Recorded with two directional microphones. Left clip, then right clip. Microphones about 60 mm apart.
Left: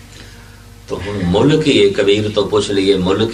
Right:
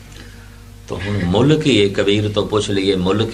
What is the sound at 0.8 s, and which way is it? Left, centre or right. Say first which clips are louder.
A man's voice: left 2 dB; right.